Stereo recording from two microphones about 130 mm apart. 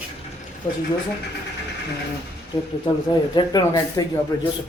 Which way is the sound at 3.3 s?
30° left (ahead or behind).